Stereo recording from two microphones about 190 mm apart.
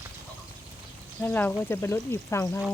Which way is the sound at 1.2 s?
10° left (ahead or behind).